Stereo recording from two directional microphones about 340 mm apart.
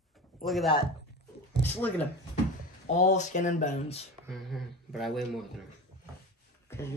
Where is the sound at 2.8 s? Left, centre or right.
Left.